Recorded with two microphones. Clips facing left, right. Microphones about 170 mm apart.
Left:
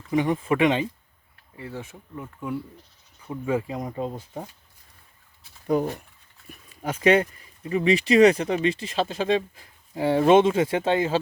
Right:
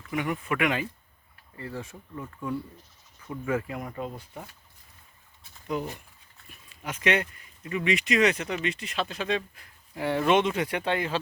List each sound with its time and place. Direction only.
0.1 s speech: 30° left (ahead or behind)
1.5 s speech: 5° left (ahead or behind); by 4.4 s 30° left (ahead or behind)
5.6 s speech: 45° left (ahead or behind)
6.8 s speech: 30° left (ahead or behind)